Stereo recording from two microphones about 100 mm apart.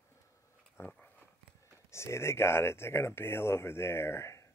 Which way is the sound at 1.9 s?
25° left (ahead or behind).